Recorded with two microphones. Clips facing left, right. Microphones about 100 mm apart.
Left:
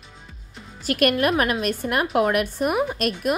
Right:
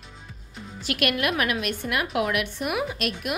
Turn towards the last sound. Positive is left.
turn(degrees=40)  # may be behind; listen again after turning